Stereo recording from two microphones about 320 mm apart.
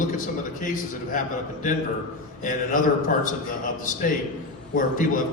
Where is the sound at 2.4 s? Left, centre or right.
Left.